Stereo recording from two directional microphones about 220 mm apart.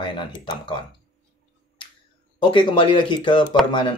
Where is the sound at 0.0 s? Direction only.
20° left (ahead or behind).